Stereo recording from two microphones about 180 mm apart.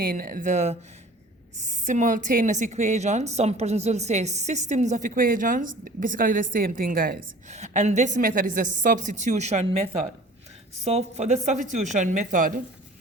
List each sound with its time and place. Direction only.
0.0 s a woman's voice: 55° right (ahead or behind)
7.5 s a woman's voice: 40° right (ahead or behind)
10.8 s a woman's voice: 35° right (ahead or behind)